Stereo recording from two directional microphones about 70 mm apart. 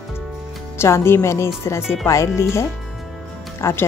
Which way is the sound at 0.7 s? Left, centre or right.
Left.